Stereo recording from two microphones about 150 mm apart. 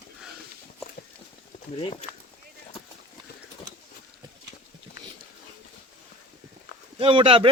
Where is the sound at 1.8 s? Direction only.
40° left (ahead or behind).